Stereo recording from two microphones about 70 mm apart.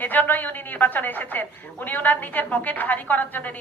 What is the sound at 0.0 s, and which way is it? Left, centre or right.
A woman's voice, left.